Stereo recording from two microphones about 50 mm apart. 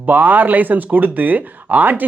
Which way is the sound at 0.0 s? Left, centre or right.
Right.